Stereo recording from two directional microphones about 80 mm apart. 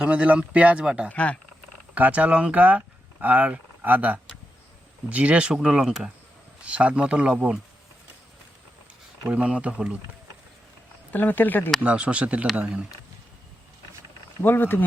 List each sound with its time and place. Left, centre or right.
0.0 s speech: centre
1.1 s speech: centre
2.0 s speech: centre
9.2 s speech: centre
11.1 s speech: left
11.8 s speech: centre
14.4 s speech: left